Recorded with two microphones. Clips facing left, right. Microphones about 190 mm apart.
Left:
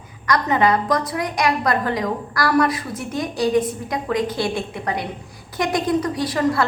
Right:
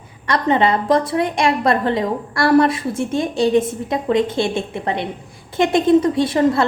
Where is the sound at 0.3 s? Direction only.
30° right (ahead or behind).